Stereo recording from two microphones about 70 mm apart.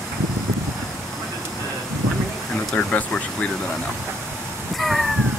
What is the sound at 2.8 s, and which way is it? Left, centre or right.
Speech, centre.